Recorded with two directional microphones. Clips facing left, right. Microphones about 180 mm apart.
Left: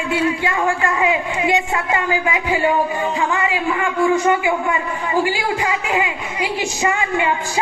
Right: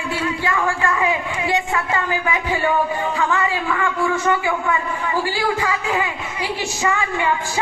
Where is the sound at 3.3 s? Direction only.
20° left (ahead or behind).